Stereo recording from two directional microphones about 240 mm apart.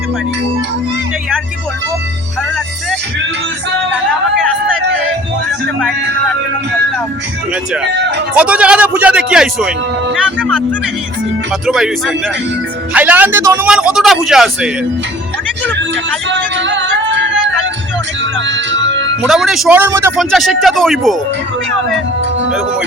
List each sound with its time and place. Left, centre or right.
8.4 s speech: centre
11.6 s speech: centre
15.7 s music: right
19.2 s speech: centre